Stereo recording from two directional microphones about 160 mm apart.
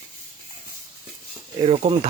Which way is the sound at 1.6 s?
40° right (ahead or behind).